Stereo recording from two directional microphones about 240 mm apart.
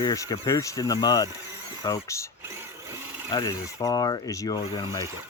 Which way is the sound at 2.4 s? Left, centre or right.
Centre.